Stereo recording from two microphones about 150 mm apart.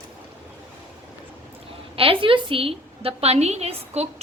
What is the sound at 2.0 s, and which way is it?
A woman's voice, 35° right (ahead or behind).